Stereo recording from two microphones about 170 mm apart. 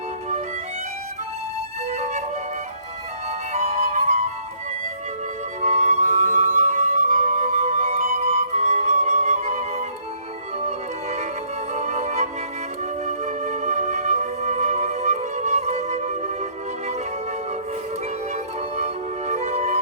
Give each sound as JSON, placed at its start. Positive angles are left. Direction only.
{"t": 1.9, "sound": "music", "side_deg": -40}
{"t": 3.5, "sound": "music", "side_deg": -35}
{"t": 5.6, "sound": "music", "side_deg": -40}
{"t": 10.7, "sound": "music", "side_deg": -40}
{"t": 19.3, "sound": "music", "side_deg": -40}